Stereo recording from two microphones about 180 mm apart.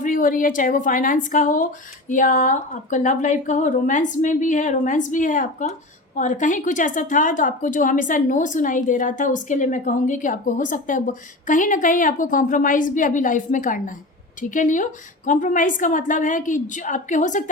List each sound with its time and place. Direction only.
0.0 s a woman's voice: 45° left (ahead or behind)